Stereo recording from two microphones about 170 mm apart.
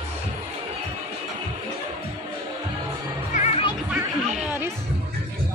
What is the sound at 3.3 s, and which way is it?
Music, 40° left (ahead or behind).